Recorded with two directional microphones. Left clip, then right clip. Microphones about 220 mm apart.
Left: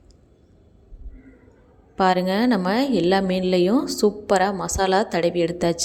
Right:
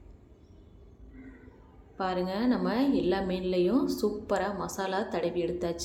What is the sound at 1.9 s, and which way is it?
A woman's voice, 40° left (ahead or behind).